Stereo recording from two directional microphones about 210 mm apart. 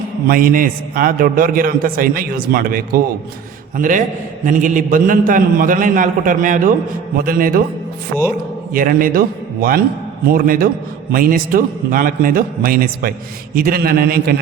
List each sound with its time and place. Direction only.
0.3 s a man's voice: 40° right (ahead or behind)
8.7 s a man's voice: 40° right (ahead or behind)